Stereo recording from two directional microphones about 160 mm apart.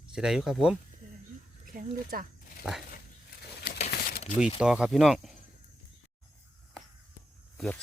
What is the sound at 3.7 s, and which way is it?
Crumpling, 60° left (ahead or behind).